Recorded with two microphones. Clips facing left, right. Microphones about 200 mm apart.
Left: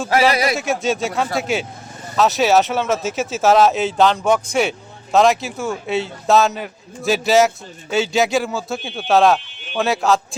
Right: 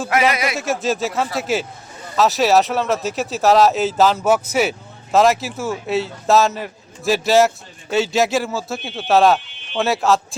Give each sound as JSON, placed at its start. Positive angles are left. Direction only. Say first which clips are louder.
{"t": 0.1, "sound": "speech", "louder": "left 2 dB", "side_deg": 35}
{"t": 0.5, "sound": "a man's voice", "louder": "left 1 dB", "side_deg": 0}